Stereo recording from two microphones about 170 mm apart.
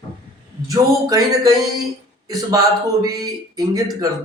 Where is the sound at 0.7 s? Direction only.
20° right (ahead or behind).